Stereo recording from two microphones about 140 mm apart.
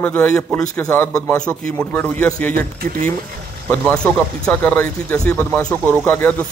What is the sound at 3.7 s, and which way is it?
Speech, 10° left (ahead or behind).